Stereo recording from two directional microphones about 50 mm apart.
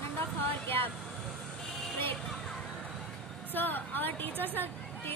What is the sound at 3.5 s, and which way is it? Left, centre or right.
A woman's voice, left.